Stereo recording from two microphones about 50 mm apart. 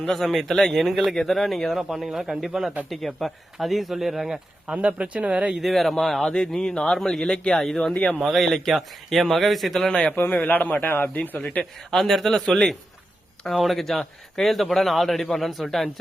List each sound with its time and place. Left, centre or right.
0.0 s a man's voice: centre
4.6 s speech: centre
5.5 s speech: centre
8.2 s a man's voice: centre
9.9 s speech: centre
10.4 s a man's voice: left
11.9 s speech: centre
13.4 s a man's voice: centre